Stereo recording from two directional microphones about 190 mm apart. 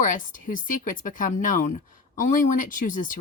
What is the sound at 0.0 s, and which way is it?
A woman's voice, 45° left (ahead or behind).